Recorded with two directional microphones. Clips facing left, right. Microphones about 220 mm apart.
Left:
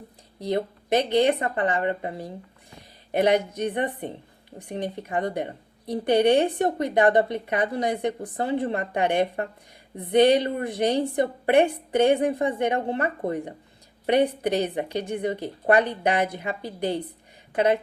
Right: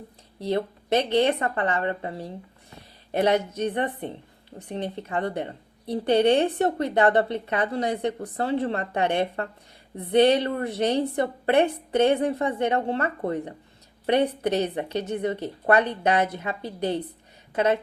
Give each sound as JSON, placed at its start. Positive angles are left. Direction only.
{"t": 0.3, "sound": "a woman's voice", "side_deg": 15}